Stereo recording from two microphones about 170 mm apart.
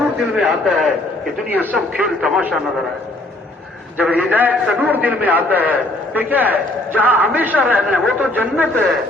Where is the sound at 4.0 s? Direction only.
10° right (ahead or behind).